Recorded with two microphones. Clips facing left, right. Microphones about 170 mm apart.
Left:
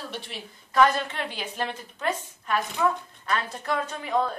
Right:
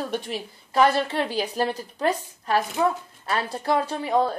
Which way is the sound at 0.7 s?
30° right (ahead or behind).